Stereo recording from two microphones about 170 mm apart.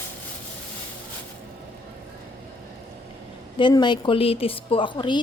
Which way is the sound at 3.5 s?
25° left (ahead or behind).